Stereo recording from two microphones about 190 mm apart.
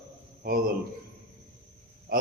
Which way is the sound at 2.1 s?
50° right (ahead or behind).